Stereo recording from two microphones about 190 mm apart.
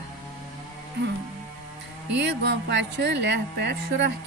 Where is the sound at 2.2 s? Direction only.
65° right (ahead or behind).